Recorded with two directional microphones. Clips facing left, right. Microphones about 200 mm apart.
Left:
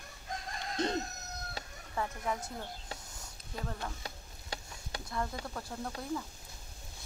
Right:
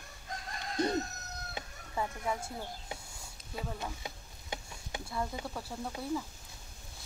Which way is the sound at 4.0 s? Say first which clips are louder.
Right 1 dB; 20° right (ahead or behind).